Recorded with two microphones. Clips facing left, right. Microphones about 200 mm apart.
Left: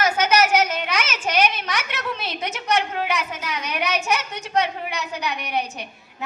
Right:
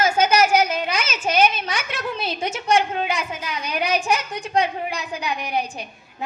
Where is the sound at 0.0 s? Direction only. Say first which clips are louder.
Right 2 dB; 30° right (ahead or behind).